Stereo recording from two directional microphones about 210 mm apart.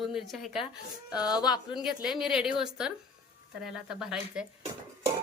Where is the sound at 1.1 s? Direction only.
20° left (ahead or behind).